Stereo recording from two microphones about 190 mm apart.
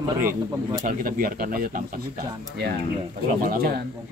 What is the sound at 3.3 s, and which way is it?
Speech, 50° right (ahead or behind).